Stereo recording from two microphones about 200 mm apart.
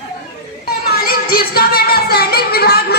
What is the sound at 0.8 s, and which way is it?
Music, 50° left (ahead or behind).